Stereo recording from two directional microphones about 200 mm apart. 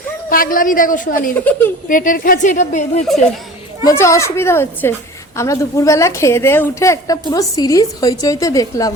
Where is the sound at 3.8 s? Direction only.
15° left (ahead or behind).